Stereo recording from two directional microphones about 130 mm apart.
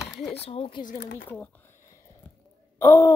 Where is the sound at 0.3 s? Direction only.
50° left (ahead or behind).